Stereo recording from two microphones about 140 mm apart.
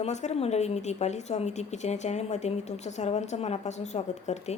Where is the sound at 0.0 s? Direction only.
55° left (ahead or behind).